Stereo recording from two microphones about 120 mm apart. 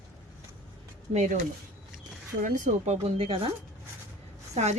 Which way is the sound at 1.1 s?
80° right.